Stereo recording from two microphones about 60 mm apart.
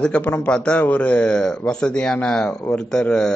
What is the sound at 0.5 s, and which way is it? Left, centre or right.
A man's voice, centre.